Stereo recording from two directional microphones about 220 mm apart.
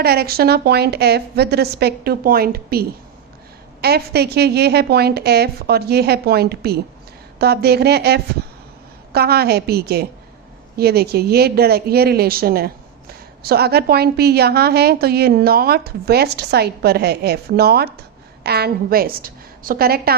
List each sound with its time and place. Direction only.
0.0 s a woman's voice: 45° right (ahead or behind)